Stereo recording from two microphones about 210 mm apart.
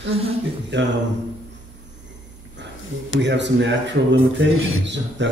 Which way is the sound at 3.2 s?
55° right (ahead or behind).